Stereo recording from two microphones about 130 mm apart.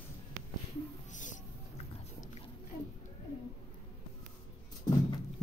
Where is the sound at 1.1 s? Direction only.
75° left (ahead or behind).